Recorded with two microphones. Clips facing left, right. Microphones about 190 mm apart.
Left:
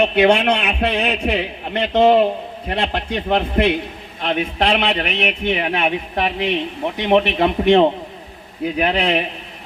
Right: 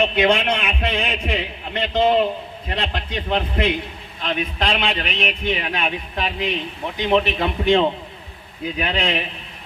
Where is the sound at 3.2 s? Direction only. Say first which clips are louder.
Left 4 dB; 60° left (ahead or behind).